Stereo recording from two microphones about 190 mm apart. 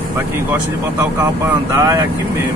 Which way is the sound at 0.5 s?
15° right (ahead or behind).